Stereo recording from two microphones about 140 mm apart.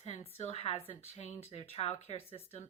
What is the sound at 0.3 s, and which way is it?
Speech, 45° left (ahead or behind).